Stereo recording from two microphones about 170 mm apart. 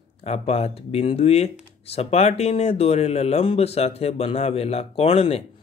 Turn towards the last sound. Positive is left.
turn(degrees=35)  # may be behind; listen again after turning